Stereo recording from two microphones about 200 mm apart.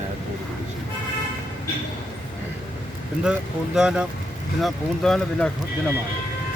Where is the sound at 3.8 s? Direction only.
5° right (ahead or behind).